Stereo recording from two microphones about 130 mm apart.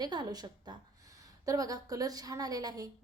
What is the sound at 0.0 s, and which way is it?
A woman's voice, 35° right (ahead or behind).